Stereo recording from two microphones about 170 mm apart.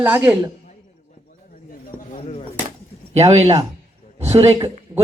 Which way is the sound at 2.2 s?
35° left (ahead or behind).